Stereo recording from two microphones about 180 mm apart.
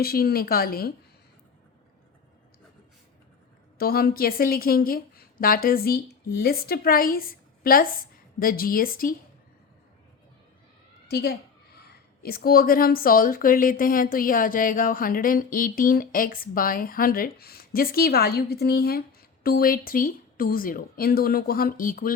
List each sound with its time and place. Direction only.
0.0 s a woman's voice: 55° left (ahead or behind)
3.8 s a woman's voice: 55° left (ahead or behind)
11.1 s a sound: 60° left (ahead or behind)
12.2 s speech: 55° left (ahead or behind)